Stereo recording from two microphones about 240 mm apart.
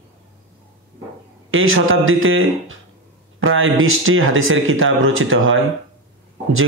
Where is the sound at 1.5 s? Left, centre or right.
Right.